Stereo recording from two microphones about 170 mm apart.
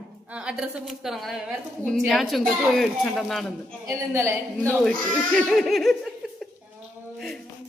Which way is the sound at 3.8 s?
15° right (ahead or behind).